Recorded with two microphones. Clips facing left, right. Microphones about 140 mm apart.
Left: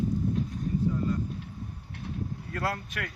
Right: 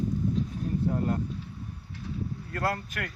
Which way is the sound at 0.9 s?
65° right (ahead or behind).